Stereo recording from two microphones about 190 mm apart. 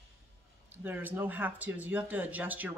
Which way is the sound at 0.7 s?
10° right (ahead or behind).